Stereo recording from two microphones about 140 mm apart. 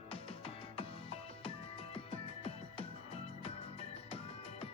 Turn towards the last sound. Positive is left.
turn(degrees=45)  # may be behind; listen again after turning